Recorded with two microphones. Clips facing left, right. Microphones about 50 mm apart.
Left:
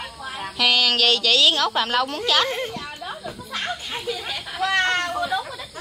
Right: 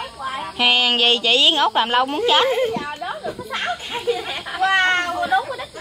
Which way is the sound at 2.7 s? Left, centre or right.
Right.